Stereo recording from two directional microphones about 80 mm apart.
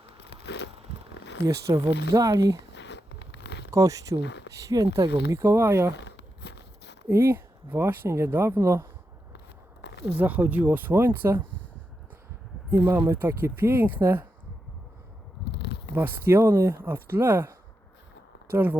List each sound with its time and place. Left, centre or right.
1.5 s speech: right
3.7 s speech: right
5.3 s speech: right
7.1 s speech: right
10.2 s speech: right
12.7 s speech: right
16.0 s speech: right
18.5 s speech: right